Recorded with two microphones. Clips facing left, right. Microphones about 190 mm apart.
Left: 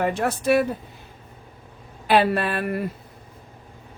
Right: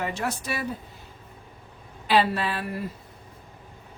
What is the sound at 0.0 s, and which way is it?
Speech, 55° left (ahead or behind).